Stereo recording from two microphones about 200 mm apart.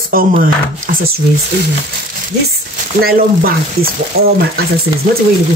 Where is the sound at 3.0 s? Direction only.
50° right (ahead or behind).